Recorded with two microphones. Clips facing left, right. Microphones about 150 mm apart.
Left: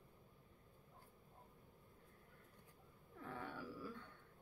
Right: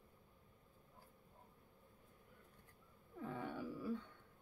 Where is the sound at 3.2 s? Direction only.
15° right (ahead or behind).